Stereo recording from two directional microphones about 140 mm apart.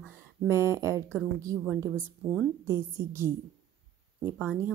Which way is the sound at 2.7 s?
20° right (ahead or behind).